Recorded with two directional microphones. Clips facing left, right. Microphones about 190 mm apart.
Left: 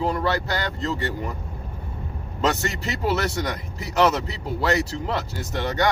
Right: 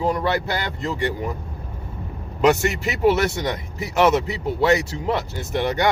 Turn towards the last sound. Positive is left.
turn(degrees=-20)  # may be behind; listen again after turning